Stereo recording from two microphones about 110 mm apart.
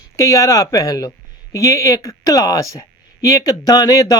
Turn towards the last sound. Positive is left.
turn(degrees=30)  # may be behind; listen again after turning